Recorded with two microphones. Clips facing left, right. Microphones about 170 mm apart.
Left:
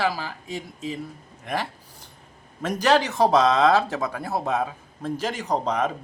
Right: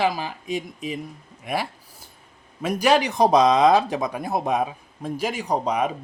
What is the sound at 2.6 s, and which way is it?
Speech, 10° right (ahead or behind).